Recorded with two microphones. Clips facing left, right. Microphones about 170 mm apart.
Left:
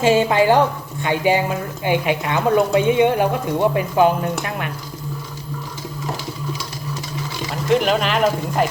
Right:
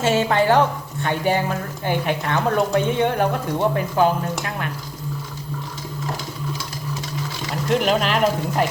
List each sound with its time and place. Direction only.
0.0 s a woman's voice: 15° left (ahead or behind)
7.7 s speech: centre (ahead or behind)